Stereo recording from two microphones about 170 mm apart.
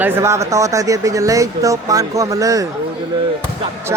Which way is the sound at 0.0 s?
15° right (ahead or behind).